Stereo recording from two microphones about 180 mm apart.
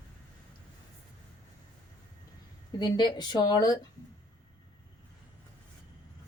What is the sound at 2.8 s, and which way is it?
A woman's voice, 25° left (ahead or behind).